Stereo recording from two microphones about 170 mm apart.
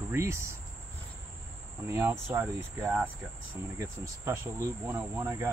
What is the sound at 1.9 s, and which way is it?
Cricket, 15° right (ahead or behind).